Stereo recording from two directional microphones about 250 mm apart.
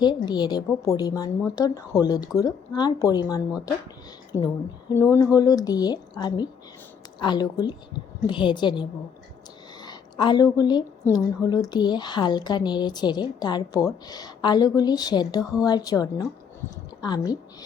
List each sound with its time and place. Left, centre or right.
0.0 s a woman's voice: centre